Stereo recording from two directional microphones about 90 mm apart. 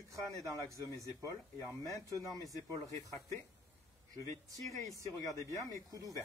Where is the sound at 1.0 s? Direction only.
35° right (ahead or behind).